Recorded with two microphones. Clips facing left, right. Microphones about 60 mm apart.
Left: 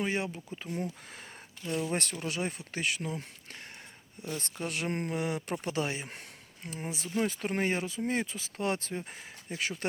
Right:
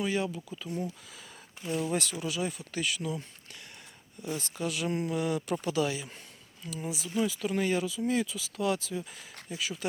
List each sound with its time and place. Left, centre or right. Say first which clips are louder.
0.0 s speech: right 2 dB; left
1.6 s speech: right 1 dB; centre
1.9 s speech: right 2 dB; left
4.6 s speech: right 2 dB; left
5.1 s speech: right 3 dB; left
6.1 s a sound: left 3 dB; left
6.7 s speech: right 1 dB; left